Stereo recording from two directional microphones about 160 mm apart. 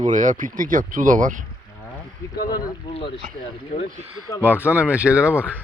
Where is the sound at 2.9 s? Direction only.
35° left (ahead or behind).